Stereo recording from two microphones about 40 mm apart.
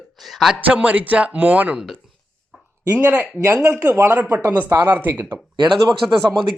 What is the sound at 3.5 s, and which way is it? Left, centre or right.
Speech, right.